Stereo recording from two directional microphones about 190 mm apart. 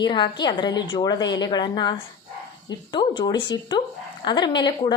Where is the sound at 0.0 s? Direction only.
25° left (ahead or behind).